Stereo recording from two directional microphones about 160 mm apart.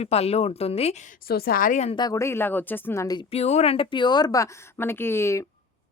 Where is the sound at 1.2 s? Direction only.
70° left (ahead or behind).